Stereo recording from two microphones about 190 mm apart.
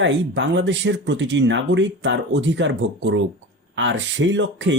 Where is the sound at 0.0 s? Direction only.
70° right (ahead or behind).